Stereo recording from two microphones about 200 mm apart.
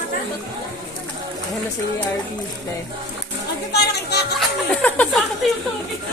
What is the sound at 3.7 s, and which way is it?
Music, 55° left (ahead or behind).